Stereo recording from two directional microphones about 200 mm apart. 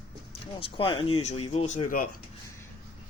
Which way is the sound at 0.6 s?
25° left (ahead or behind).